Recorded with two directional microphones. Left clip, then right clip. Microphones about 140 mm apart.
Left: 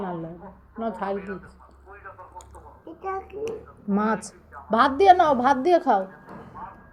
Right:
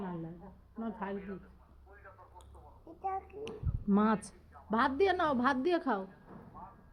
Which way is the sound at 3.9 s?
90° right.